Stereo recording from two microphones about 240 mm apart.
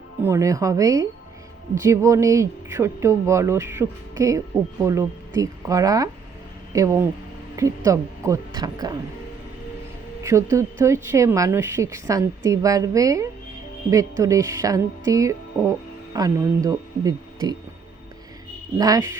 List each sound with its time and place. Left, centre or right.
0.2 s speech: centre
10.2 s speech: centre
18.8 s speech: centre